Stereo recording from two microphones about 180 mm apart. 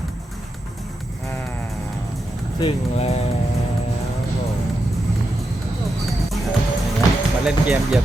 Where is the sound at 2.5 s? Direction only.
30° left (ahead or behind).